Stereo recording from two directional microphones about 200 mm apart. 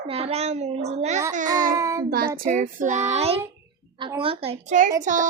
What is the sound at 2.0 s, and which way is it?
Child singing, 45° right (ahead or behind).